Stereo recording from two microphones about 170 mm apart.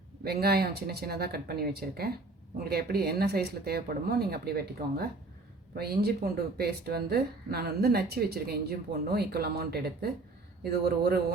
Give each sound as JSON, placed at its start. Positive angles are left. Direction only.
{"t": 0.3, "sound": "a man's voice", "side_deg": -70}